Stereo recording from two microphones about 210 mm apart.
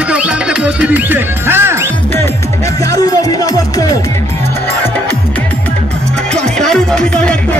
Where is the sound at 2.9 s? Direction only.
20° left (ahead or behind).